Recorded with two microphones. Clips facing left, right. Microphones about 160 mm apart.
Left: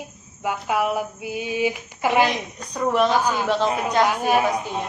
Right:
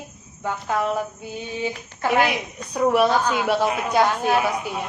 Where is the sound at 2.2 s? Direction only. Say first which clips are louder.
Left 1 dB; 10° right (ahead or behind).